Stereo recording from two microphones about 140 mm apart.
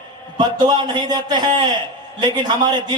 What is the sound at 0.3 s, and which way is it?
A man's voice, 30° right (ahead or behind).